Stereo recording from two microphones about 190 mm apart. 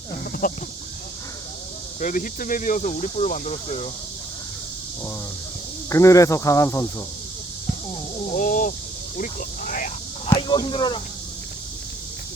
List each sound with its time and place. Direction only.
0.4 s speech: 45° left (ahead or behind)
2.0 s speech: 45° left (ahead or behind)
5.9 s speech: 15° left (ahead or behind)
8.3 s a sound: 40° left (ahead or behind)
9.1 s snake: 45° left (ahead or behind)
10.2 s speech: 25° left (ahead or behind)